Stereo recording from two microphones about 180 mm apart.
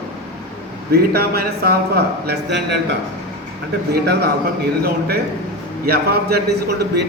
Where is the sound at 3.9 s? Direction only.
65° right (ahead or behind).